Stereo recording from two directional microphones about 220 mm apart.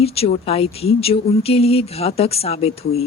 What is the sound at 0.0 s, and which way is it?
A woman's voice, 25° left (ahead or behind).